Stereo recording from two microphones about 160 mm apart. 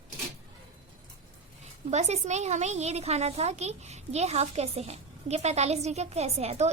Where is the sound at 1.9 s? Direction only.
45° right (ahead or behind).